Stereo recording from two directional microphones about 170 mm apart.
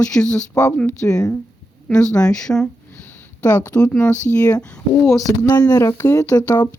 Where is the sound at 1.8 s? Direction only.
5° left (ahead or behind).